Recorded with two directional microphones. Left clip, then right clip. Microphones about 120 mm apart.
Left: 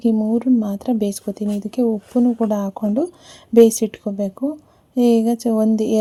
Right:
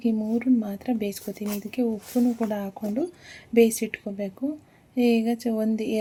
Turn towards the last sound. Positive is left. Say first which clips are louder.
# left 8 dB
turn(degrees=60)  # may be behind; listen again after turning